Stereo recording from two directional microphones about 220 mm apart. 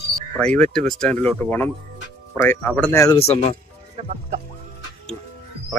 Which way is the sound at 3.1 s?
30° left (ahead or behind).